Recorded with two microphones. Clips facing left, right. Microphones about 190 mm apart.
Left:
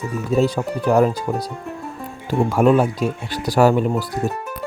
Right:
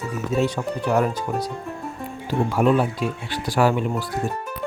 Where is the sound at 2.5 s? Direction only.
45° left (ahead or behind).